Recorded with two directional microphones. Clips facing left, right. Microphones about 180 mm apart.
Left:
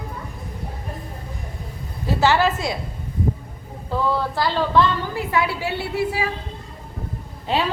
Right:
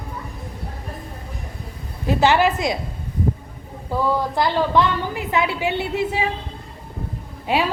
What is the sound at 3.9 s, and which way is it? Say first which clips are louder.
A woman's voice: right 2 dB; 10° right (ahead or behind).